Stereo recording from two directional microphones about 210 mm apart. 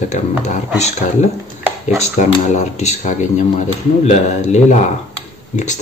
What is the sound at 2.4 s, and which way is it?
Speech, 35° left (ahead or behind).